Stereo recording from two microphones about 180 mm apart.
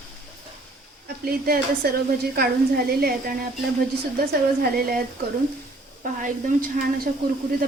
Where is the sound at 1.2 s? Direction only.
55° right (ahead or behind).